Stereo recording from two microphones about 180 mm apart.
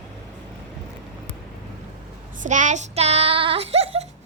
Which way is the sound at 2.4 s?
45° right (ahead or behind).